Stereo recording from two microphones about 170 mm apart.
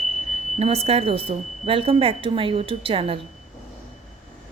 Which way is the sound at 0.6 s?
35° right (ahead or behind).